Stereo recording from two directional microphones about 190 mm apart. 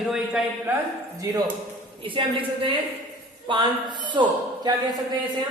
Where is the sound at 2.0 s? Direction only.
25° right (ahead or behind).